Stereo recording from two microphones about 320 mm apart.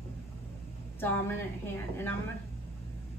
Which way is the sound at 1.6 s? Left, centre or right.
Centre.